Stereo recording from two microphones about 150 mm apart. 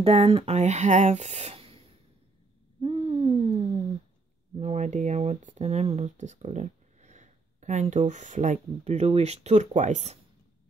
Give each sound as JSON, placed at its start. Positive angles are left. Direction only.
{"t": 0.0, "sound": "speech", "side_deg": -40}
{"t": 2.8, "sound": "owl", "side_deg": -40}
{"t": 4.6, "sound": "speech", "side_deg": -50}